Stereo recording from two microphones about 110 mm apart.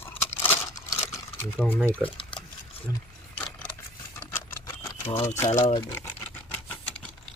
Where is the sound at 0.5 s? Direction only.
30° left (ahead or behind).